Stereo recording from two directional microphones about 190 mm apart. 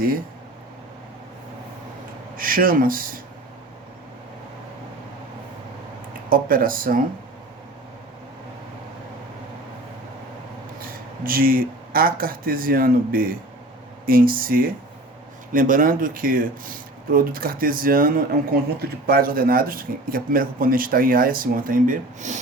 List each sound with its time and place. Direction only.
2.3 s speech: 50° right (ahead or behind)
6.3 s speech: 45° right (ahead or behind)
10.8 s speech: 50° right (ahead or behind)